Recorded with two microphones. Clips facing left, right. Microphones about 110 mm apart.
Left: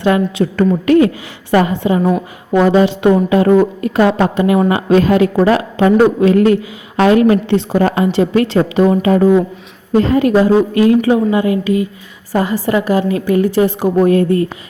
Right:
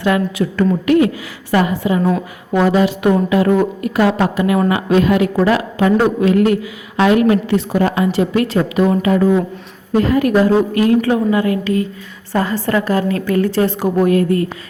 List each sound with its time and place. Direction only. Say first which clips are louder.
0.0 s a woman's voice: left 3 dB; 30° left (ahead or behind)
7.8 s speech: left 2 dB; 40° left (ahead or behind)
8.0 s a woman's voice: left 3 dB; 30° left (ahead or behind)
14.0 s a woman's voice: left 2 dB; 25° left (ahead or behind)